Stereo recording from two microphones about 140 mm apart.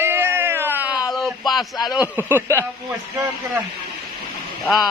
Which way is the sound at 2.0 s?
15° right (ahead or behind).